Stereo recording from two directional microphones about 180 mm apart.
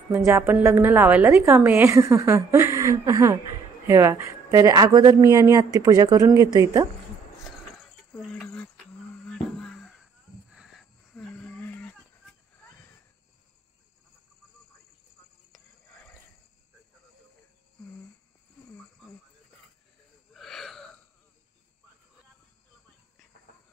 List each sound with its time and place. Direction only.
0.1 s a woman's voice: 15° right (ahead or behind)
8.1 s a sound: 5° left (ahead or behind)
20.3 s wheeze: centre (ahead or behind)